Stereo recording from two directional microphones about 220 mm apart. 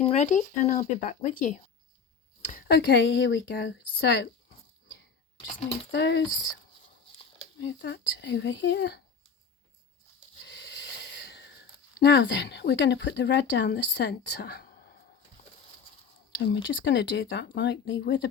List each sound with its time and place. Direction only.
0.0 s speech: 30° left (ahead or behind); by 6.2 s 55° left (ahead or behind)
7.6 s speech: 55° left (ahead or behind)
10.4 s wheeze: 55° left (ahead or behind)
11.9 s speech: 55° left (ahead or behind)
16.6 s speech: 55° left (ahead or behind)